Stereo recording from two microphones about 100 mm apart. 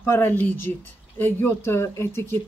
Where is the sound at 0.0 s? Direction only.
20° left (ahead or behind).